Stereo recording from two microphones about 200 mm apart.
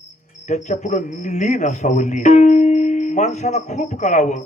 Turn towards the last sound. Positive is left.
turn(degrees=35)  # may be behind; listen again after turning